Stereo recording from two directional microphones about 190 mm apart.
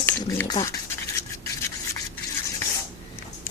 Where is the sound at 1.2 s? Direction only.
15° left (ahead or behind).